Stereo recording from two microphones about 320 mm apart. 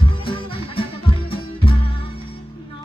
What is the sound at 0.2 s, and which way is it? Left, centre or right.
Music, centre.